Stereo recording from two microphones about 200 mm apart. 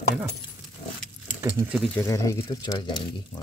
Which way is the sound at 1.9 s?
15° left (ahead or behind).